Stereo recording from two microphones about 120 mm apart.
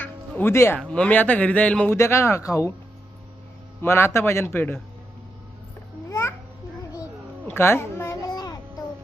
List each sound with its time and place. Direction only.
0.0 s music: 15° left (ahead or behind)
0.8 s a man's voice: 10° left (ahead or behind)
2.0 s a man's voice: 25° left (ahead or behind)
3.8 s a man's voice: 20° left (ahead or behind)
6.1 s babbling: 20° left (ahead or behind)
7.4 s a sound: 20° left (ahead or behind)
8.3 s child singing: 35° left (ahead or behind)